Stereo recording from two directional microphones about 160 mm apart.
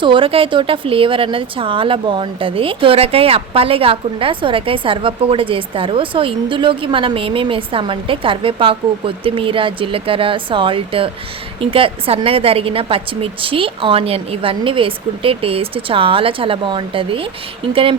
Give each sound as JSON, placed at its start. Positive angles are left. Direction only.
{"t": 0.0, "sound": "speech", "side_deg": -30}